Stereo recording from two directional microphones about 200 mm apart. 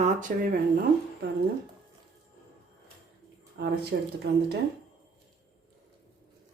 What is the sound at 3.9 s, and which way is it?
Speech, 60° right (ahead or behind).